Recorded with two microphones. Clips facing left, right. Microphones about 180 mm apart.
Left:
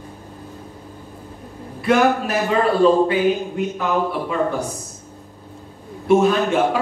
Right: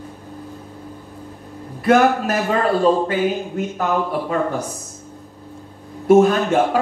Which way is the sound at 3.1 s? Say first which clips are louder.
Left 2 dB; 45° right (ahead or behind).